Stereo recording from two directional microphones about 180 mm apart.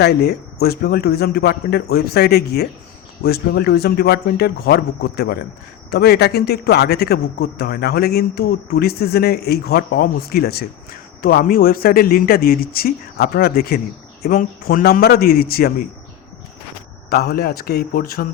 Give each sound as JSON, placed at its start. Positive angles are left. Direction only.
{"t": 0.0, "sound": "speech", "side_deg": 60}
{"t": 17.1, "sound": "speech", "side_deg": 55}